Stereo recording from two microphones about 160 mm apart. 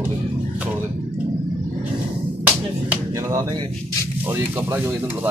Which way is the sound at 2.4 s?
10° right (ahead or behind).